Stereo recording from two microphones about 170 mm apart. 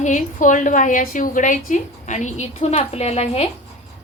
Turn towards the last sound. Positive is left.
turn(degrees=35)  # may be behind; listen again after turning